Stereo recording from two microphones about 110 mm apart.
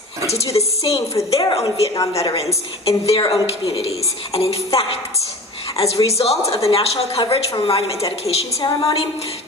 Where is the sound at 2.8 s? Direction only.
55° left (ahead or behind).